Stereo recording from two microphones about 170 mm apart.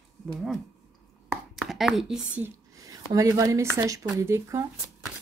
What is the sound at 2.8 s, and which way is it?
Speech, 20° right (ahead or behind).